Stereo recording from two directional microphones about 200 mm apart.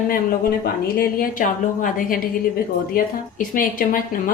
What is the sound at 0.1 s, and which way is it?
Speech, 45° left (ahead or behind).